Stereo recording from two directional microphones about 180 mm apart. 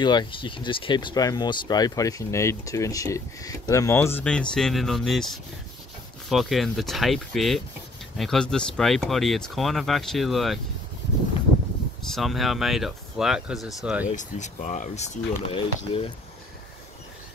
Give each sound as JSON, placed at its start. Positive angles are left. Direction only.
{"t": 0.0, "sound": "speech", "side_deg": 25}
{"t": 12.1, "sound": "speech", "side_deg": 0}
{"t": 14.1, "sound": "speech", "side_deg": 40}